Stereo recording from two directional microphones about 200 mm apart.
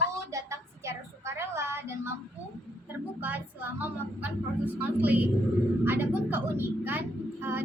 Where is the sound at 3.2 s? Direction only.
10° right (ahead or behind).